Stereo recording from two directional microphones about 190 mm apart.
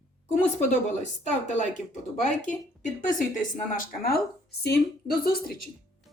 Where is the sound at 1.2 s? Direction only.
40° left (ahead or behind).